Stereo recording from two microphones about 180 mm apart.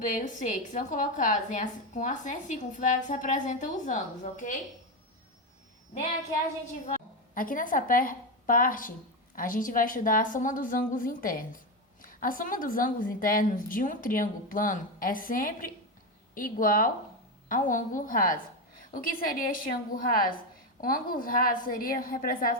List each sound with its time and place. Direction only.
0.1 s a woman's voice: 45° left (ahead or behind)
7.3 s a woman's voice: 50° left (ahead or behind)